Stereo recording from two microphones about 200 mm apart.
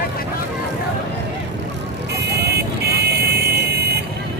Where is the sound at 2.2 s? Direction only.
55° right (ahead or behind).